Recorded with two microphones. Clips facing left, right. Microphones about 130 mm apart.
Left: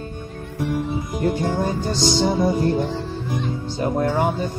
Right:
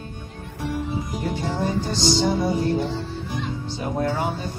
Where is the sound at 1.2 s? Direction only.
50° left (ahead or behind).